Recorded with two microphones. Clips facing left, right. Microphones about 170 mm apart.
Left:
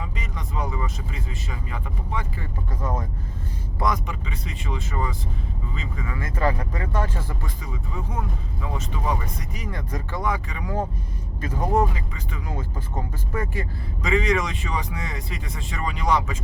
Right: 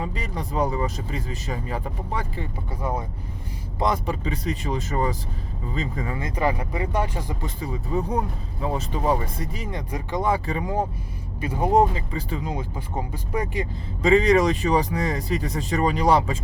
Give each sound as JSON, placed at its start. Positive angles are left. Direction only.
{"t": 0.0, "sound": "speech", "side_deg": -35}
{"t": 3.8, "sound": "speech", "side_deg": -30}
{"t": 6.1, "sound": "speech", "side_deg": -15}
{"t": 7.6, "sound": "speech", "side_deg": -35}
{"t": 9.7, "sound": "speech", "side_deg": -20}
{"t": 10.2, "sound": "speech", "side_deg": -30}
{"t": 11.3, "sound": "speech", "side_deg": -15}
{"t": 11.9, "sound": "speech", "side_deg": -30}
{"t": 13.3, "sound": "speech", "side_deg": -15}
{"t": 14.0, "sound": "speech", "side_deg": -35}